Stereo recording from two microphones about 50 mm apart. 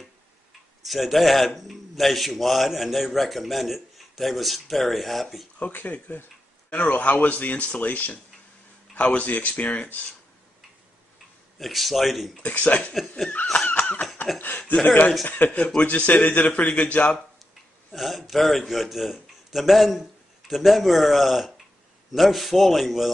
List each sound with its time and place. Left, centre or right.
0.8 s a man's voice: centre
5.6 s a man's voice: left
11.5 s a man's voice: centre
12.4 s speech: left
13.7 s laughter: left
14.7 s a man's voice: left
17.9 s a man's voice: centre